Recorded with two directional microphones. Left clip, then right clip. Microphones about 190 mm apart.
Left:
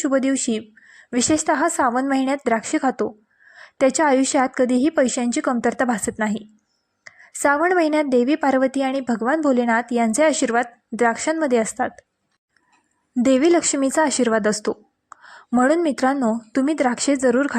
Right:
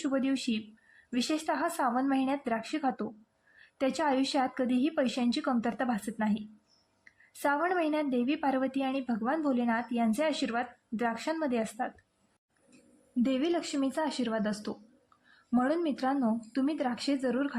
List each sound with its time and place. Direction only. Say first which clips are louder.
0.0 s a woman's voice: left 11 dB; 35° left (ahead or behind)
13.2 s a woman's voice: left 15 dB; 45° left (ahead or behind)